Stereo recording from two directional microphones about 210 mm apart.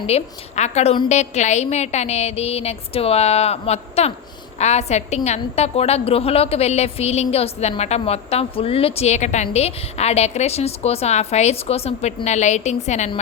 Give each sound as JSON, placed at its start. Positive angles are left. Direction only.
{"t": 0.1, "sound": "a woman's voice", "side_deg": 35}